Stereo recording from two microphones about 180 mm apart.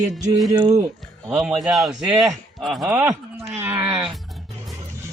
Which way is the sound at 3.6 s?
15° right (ahead or behind).